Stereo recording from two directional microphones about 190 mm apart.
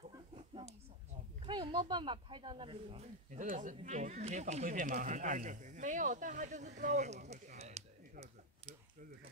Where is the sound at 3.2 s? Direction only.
40° right (ahead or behind).